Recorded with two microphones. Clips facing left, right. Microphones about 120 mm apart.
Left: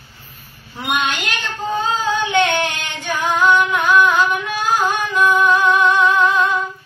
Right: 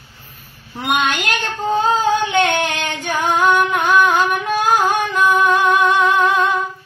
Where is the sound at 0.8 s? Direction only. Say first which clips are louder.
Right 2 dB; 45° right (ahead or behind).